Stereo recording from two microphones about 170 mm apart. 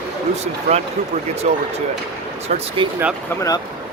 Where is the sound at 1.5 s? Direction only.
40° right (ahead or behind).